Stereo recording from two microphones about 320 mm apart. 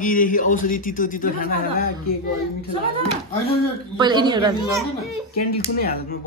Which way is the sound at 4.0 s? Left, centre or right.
Centre.